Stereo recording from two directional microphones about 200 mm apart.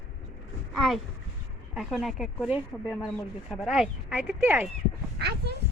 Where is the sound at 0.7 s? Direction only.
Centre (ahead or behind).